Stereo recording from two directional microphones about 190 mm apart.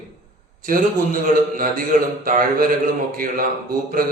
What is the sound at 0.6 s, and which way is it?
A man's voice, 45° right (ahead or behind).